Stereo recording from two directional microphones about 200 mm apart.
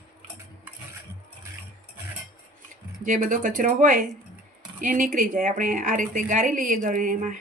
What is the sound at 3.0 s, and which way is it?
Speech, 40° right (ahead or behind).